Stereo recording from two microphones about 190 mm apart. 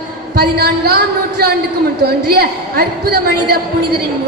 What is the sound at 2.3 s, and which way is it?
A woman's voice, 55° right (ahead or behind).